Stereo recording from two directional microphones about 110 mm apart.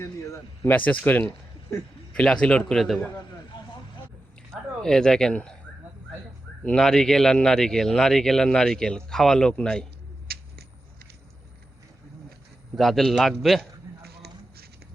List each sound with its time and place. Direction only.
0.0 s a man's voice: 25° left (ahead or behind); by 3.0 s centre (ahead or behind)
3.5 s vehicle: 45° left (ahead or behind)
4.8 s a man's voice: 5° left (ahead or behind)
6.7 s a man's voice: 5° left (ahead or behind)
12.7 s a man's voice: centre (ahead or behind)